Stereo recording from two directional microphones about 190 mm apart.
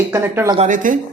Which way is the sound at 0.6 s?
40° right (ahead or behind).